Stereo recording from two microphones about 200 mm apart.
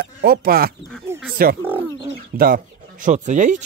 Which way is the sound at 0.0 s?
50° right (ahead or behind).